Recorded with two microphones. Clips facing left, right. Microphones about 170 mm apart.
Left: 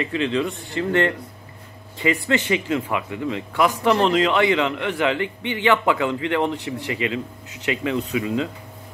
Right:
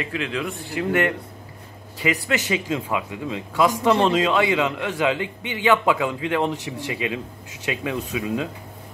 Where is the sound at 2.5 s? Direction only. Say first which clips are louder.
Left 2 dB; 15° right (ahead or behind).